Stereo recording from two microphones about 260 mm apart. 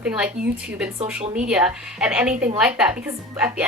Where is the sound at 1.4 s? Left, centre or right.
Centre.